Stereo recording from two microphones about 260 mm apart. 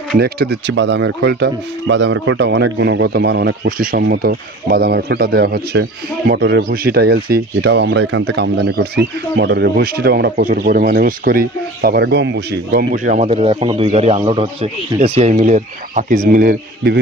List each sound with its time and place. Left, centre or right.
0.2 s speech: right
12.9 s a man's voice: right